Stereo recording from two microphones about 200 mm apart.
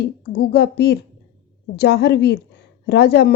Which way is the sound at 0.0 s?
55° left (ahead or behind).